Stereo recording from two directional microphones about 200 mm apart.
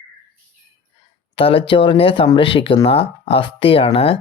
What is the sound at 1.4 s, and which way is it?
Speech, 25° left (ahead or behind).